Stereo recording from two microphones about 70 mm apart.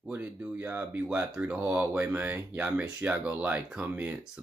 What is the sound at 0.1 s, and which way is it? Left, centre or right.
Speech, right.